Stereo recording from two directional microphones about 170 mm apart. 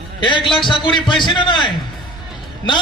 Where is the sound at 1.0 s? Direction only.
30° left (ahead or behind).